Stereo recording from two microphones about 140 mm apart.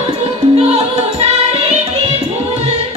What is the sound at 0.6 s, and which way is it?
Music, 50° right (ahead or behind).